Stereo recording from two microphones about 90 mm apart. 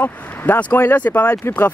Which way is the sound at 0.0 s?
20° left (ahead or behind).